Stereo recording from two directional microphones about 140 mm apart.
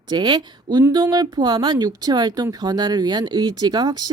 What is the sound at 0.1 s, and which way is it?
A woman's voice, 30° right (ahead or behind).